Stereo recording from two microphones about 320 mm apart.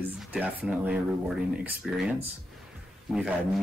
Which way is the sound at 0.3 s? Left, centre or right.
Centre.